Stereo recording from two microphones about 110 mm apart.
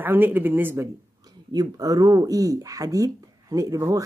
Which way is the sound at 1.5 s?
35° right (ahead or behind).